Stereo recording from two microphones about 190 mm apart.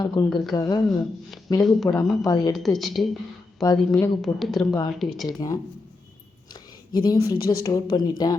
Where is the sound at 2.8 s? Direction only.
Centre (ahead or behind).